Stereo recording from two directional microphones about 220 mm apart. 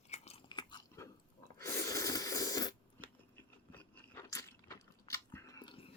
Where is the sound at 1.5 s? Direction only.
15° left (ahead or behind).